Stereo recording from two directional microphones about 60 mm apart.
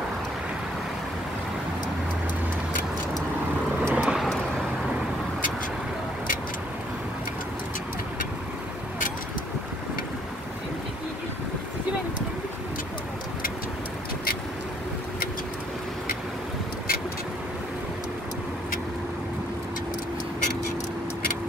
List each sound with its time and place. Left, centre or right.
3.9 s vehicle: centre